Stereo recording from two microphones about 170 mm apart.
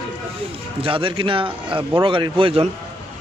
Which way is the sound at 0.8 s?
30° right (ahead or behind).